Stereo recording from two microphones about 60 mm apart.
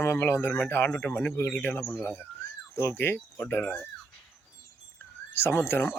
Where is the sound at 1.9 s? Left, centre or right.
Left.